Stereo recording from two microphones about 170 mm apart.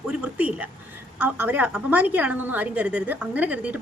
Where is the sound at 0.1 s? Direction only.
10° right (ahead or behind).